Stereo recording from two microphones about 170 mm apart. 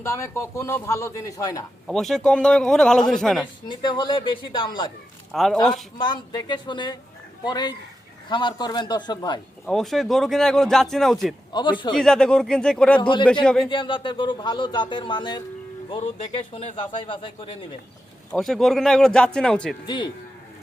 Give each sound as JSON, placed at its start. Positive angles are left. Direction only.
{"t": 0.0, "sound": "a man's voice", "side_deg": 15}
{"t": 1.9, "sound": "a man's voice", "side_deg": 0}
{"t": 3.7, "sound": "speech", "side_deg": 25}
{"t": 5.3, "sound": "a man's voice", "side_deg": 0}
{"t": 6.0, "sound": "speech", "side_deg": 25}
{"t": 9.6, "sound": "a man's voice", "side_deg": 0}
{"t": 11.5, "sound": "speech", "side_deg": 30}
{"t": 11.9, "sound": "a man's voice", "side_deg": 5}
{"t": 13.0, "sound": "speech", "side_deg": 25}
{"t": 13.4, "sound": "a man's voice", "side_deg": 5}
{"t": 13.7, "sound": "speech", "side_deg": 30}
{"t": 15.9, "sound": "speech", "side_deg": 40}
{"t": 18.3, "sound": "a man's voice", "side_deg": 0}